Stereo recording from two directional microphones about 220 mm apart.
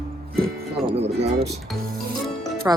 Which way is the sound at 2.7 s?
10° right (ahead or behind).